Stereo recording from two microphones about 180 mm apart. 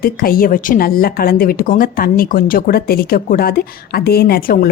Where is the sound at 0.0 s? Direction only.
55° left (ahead or behind).